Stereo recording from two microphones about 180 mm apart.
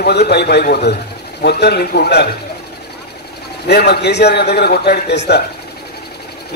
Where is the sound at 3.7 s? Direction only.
65° left (ahead or behind).